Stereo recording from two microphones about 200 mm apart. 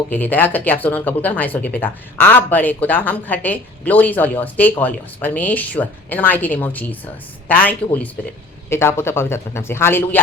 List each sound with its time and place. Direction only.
0.1 s speech: 10° left (ahead or behind)